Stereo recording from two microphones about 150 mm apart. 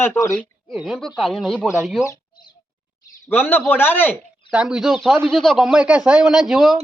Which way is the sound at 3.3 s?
15° left (ahead or behind).